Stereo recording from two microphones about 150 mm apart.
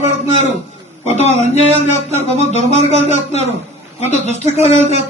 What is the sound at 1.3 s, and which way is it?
Music, 50° right (ahead or behind).